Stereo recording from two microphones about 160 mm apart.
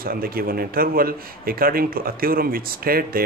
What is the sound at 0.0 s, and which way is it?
A man's voice, 65° right (ahead or behind).